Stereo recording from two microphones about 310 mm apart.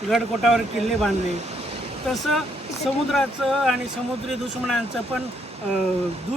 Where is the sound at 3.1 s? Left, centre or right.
Centre.